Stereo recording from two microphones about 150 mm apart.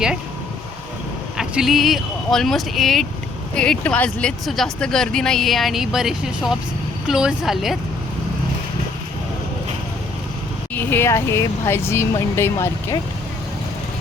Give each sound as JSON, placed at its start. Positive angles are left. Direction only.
{"t": 1.4, "sound": "speech", "side_deg": 0}
{"t": 10.8, "sound": "speech", "side_deg": 15}